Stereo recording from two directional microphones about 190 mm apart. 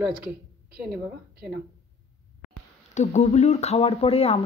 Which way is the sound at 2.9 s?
35° left (ahead or behind).